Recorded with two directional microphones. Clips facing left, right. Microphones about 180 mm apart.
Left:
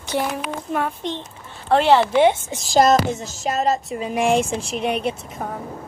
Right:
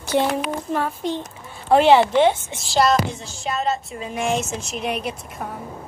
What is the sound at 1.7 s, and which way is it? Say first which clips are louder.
Speech: right 2 dB; 15° right (ahead or behind).